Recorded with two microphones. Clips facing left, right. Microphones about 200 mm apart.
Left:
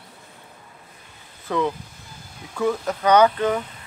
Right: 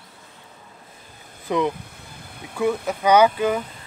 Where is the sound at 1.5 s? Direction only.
15° right (ahead or behind).